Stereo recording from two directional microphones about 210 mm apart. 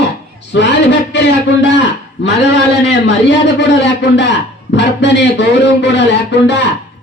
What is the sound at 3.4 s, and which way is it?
Speech, 55° left (ahead or behind).